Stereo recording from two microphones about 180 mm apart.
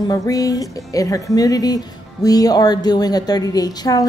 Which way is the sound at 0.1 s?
20° left (ahead or behind).